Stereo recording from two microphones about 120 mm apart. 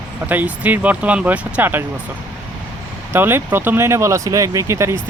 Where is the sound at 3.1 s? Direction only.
20° right (ahead or behind).